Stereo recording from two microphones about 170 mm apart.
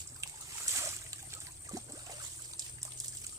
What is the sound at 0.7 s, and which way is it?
Boat, 15° right (ahead or behind).